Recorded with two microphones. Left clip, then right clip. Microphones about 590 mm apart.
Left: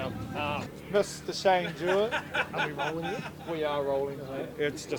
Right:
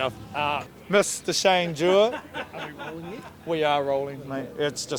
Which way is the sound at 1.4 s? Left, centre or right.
Right.